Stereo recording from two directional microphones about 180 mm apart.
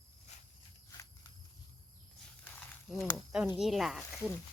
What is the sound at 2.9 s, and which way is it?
Speech, centre (ahead or behind).